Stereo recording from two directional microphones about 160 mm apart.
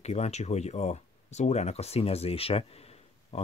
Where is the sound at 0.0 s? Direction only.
40° left (ahead or behind).